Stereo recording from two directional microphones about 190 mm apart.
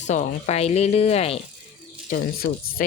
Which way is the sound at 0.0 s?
40° left (ahead or behind).